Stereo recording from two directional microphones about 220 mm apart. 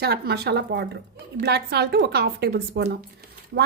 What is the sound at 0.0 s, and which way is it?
A woman's voice, 45° right (ahead or behind).